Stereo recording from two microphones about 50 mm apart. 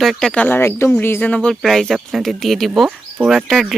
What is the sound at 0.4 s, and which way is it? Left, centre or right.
Speech, left.